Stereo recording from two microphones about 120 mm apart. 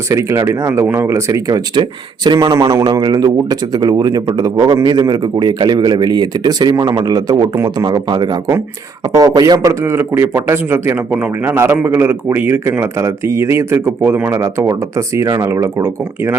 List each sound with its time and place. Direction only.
0.1 s speech: 25° right (ahead or behind)